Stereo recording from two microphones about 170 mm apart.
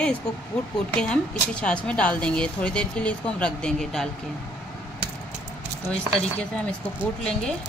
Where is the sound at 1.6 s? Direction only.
5° left (ahead or behind).